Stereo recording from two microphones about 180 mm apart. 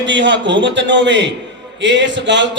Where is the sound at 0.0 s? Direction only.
90° right.